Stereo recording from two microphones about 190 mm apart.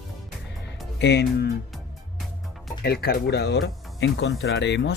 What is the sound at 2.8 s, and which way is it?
Speech, 55° left (ahead or behind).